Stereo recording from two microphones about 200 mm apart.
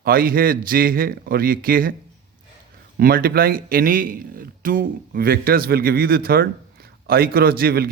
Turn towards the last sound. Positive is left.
turn(degrees=-50)  # may be behind; listen again after turning